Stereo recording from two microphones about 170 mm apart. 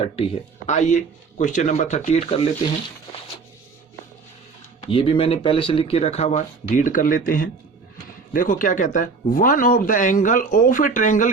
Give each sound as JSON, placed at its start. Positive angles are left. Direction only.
{"t": 0.7, "sound": "speech", "side_deg": 45}
{"t": 4.9, "sound": "speech", "side_deg": 30}